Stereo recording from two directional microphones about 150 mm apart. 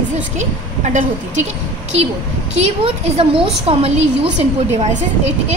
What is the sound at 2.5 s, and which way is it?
A woman's voice, 40° right (ahead or behind).